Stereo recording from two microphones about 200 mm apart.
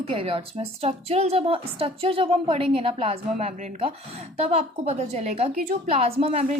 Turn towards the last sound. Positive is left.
turn(degrees=-30)  # may be behind; listen again after turning